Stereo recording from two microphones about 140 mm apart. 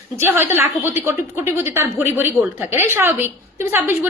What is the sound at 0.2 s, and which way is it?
A woman's voice, 15° right (ahead or behind).